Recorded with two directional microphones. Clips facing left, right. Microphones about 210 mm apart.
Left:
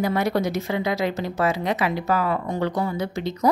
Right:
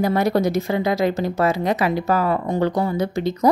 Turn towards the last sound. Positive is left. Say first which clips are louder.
# right 4 dB
turn(degrees=-40)  # may be behind; listen again after turning